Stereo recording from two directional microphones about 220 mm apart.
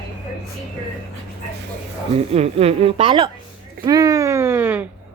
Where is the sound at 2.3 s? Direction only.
30° right (ahead or behind).